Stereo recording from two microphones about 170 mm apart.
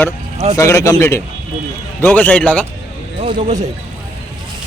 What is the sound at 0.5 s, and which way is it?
Speech, 20° left (ahead or behind).